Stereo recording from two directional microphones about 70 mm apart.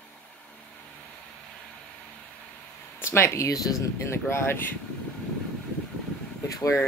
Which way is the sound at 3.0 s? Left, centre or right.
Left.